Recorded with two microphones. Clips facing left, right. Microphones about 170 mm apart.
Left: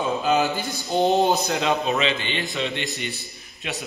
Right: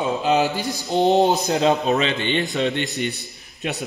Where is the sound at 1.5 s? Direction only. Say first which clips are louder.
Right 4 dB; 35° right (ahead or behind).